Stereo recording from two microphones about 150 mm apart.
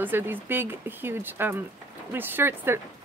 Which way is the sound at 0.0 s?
15° right (ahead or behind).